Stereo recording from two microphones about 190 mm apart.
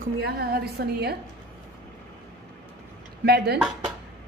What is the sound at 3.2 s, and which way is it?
Speech, 60° right (ahead or behind).